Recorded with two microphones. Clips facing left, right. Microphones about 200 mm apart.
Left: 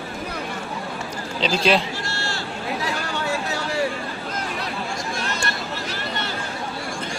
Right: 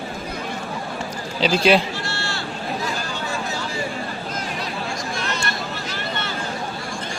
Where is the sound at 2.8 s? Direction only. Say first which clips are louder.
Left 1 dB; 65° left (ahead or behind).